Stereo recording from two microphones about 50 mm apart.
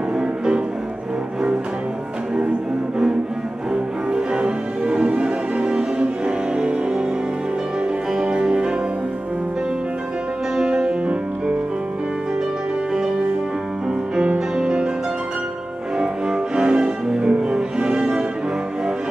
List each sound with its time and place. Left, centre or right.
3.7 s cello: centre
8.1 s music: centre
10.5 s music: centre
14.2 s music: right
16.0 s cello: centre